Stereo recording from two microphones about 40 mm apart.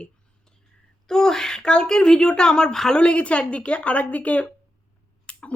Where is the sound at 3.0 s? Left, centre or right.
Left.